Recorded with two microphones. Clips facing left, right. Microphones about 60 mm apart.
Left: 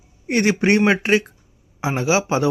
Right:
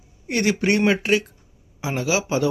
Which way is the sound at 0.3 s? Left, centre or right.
Left.